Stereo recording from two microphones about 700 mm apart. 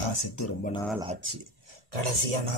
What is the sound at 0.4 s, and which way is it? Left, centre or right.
Speech, centre.